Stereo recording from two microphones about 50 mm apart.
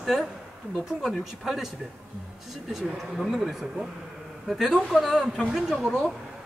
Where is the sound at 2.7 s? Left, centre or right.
Centre.